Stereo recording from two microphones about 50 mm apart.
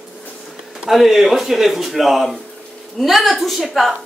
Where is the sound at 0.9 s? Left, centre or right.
Centre.